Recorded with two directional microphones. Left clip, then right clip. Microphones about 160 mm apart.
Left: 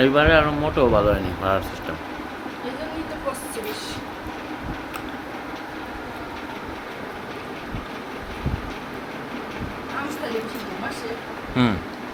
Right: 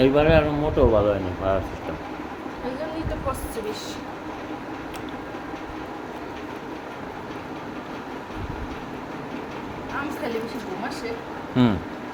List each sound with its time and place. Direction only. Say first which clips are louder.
0.0 s speech: left 2 dB; 5° right (ahead or behind)
11.6 s speech: even; 15° right (ahead or behind)